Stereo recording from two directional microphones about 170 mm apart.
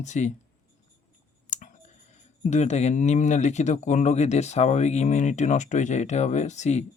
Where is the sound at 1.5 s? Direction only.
45° left (ahead or behind).